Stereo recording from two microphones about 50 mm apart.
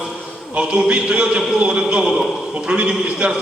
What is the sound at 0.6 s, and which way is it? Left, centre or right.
A man's voice, centre.